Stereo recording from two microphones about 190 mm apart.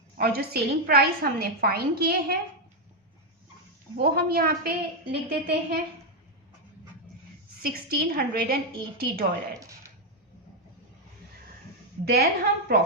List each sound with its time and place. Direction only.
0.2 s a woman's voice: 55° right (ahead or behind)
3.9 s a woman's voice: 50° right (ahead or behind)
7.6 s a woman's voice: 55° right (ahead or behind)
12.0 s a woman's voice: 55° right (ahead or behind)